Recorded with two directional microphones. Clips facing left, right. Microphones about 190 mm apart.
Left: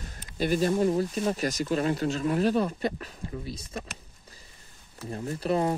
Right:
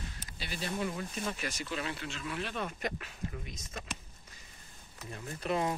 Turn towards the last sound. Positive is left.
turn(degrees=35)  # may be behind; listen again after turning